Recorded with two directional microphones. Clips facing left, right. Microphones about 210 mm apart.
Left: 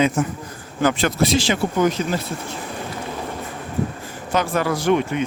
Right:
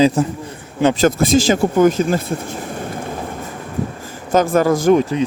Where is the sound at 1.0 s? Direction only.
45° right (ahead or behind).